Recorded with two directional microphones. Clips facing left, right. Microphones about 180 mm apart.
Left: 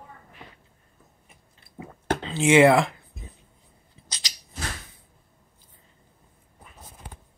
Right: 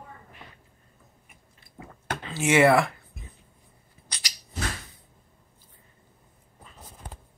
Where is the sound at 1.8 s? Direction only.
20° left (ahead or behind).